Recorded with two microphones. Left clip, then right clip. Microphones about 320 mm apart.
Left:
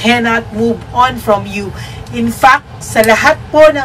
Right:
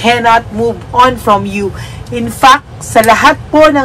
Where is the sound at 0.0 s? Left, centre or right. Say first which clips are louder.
Right 4 dB; centre.